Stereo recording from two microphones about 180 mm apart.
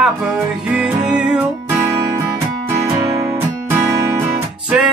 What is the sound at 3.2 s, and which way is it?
Music, 15° right (ahead or behind).